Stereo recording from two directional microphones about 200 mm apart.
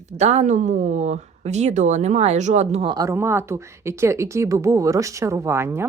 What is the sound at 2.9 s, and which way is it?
Speech, 15° right (ahead or behind).